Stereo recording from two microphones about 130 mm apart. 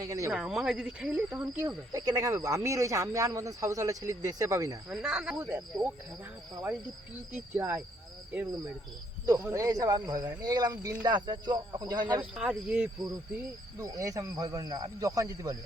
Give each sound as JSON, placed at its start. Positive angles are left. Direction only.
{"t": 0.0, "sound": "speech", "side_deg": -25}
{"t": 0.3, "sound": "speech", "side_deg": -5}
{"t": 4.9, "sound": "speech", "side_deg": -5}
{"t": 7.3, "sound": "speech", "side_deg": -15}
{"t": 9.2, "sound": "speech", "side_deg": -25}
{"t": 12.3, "sound": "speech", "side_deg": -5}
{"t": 13.7, "sound": "speech", "side_deg": -25}